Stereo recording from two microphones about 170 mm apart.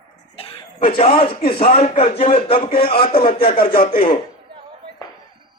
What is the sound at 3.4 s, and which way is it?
Speech, 60° left (ahead or behind).